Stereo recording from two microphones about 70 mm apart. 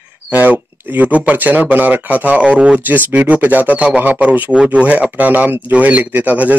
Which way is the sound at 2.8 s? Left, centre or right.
Right.